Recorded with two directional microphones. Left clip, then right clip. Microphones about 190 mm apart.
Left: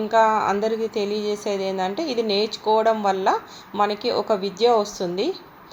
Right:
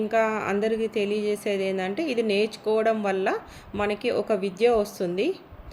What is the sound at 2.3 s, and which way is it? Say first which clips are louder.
Speech: left 6 dB; 10° right (ahead or behind).